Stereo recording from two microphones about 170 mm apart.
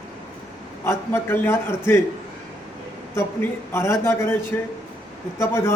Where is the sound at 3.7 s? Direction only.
15° left (ahead or behind).